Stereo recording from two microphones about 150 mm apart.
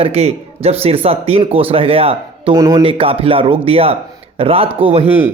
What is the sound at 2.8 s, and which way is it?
A man's voice, 40° right (ahead or behind).